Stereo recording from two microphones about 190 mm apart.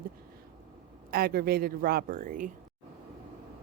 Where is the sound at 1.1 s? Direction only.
50° right (ahead or behind).